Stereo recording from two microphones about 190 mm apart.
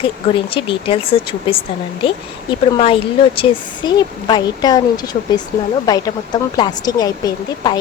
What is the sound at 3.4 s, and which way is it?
Speech, 20° left (ahead or behind).